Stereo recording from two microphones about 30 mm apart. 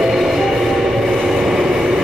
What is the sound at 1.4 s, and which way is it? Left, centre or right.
Train, right.